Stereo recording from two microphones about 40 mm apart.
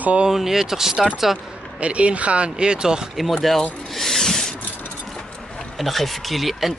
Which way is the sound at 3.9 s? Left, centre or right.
Centre.